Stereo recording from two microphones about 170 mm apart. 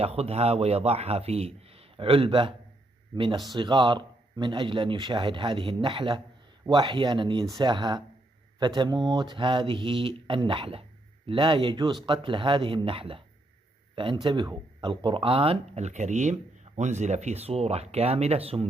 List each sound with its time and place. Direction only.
0.0 s a man's voice: 35° right (ahead or behind)